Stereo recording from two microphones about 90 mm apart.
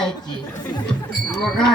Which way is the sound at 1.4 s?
5° left (ahead or behind).